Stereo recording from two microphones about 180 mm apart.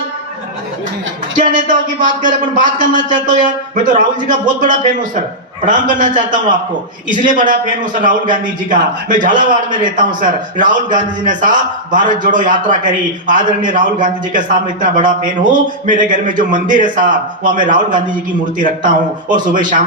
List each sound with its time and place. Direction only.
1.5 s a man's voice: 45° right (ahead or behind)
19.3 s a man's voice: 45° right (ahead or behind)